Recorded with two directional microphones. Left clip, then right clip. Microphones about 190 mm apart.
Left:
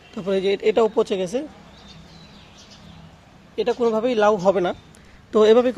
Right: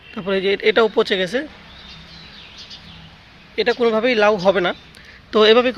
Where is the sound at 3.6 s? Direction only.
Centre (ahead or behind).